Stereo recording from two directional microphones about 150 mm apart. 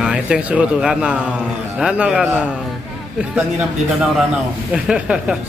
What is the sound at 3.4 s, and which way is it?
Speech, 10° right (ahead or behind).